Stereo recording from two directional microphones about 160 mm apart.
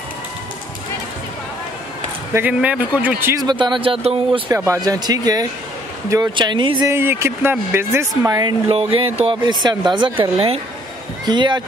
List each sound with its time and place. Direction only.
2.3 s speech: 10° right (ahead or behind)
3.4 s speech: 30° right (ahead or behind)
4.5 s speech: 20° right (ahead or behind)
6.9 s speech: 15° right (ahead or behind)
8.3 s speech: 25° right (ahead or behind)